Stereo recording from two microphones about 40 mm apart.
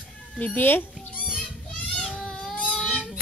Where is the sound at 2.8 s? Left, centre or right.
Centre.